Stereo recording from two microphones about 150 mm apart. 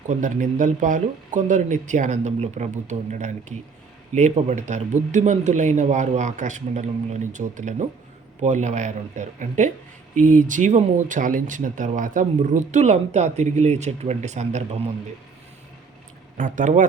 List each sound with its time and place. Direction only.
0.1 s speech: 60° right (ahead or behind)
16.4 s speech: 55° right (ahead or behind)